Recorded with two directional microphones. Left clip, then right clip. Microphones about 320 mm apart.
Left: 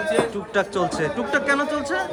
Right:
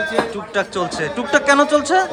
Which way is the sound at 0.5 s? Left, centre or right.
Centre.